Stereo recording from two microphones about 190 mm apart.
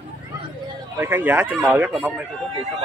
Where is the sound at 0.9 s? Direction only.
10° right (ahead or behind).